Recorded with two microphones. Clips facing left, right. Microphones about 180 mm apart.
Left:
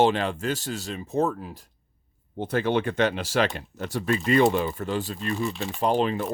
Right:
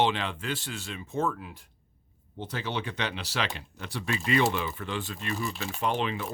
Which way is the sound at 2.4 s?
55° left (ahead or behind).